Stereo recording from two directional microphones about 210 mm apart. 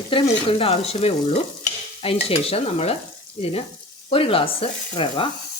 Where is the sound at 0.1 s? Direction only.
25° left (ahead or behind).